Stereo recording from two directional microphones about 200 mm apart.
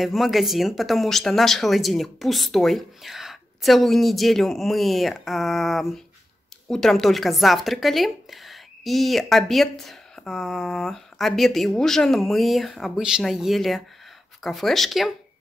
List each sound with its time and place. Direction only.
0.0 s speech: centre (ahead or behind)